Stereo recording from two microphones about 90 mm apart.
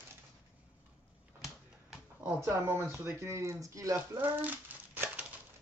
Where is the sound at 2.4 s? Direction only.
25° right (ahead or behind).